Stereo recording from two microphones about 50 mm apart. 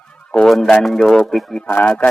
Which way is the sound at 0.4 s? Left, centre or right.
Centre.